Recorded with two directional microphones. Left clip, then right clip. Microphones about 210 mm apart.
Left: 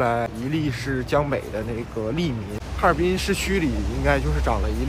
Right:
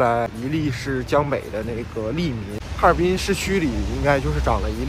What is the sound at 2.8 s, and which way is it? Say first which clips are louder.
Speech: right 3 dB; 5° left (ahead or behind).